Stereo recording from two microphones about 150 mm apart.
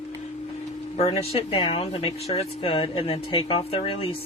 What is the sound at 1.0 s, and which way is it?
Speech, 45° left (ahead or behind).